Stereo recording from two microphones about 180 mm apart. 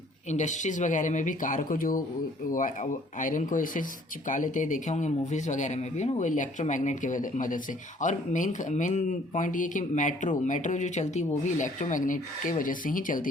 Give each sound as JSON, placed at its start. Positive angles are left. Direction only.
{"t": 0.3, "sound": "speech", "side_deg": 40}